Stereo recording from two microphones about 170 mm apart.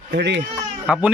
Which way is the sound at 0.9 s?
5° right (ahead or behind).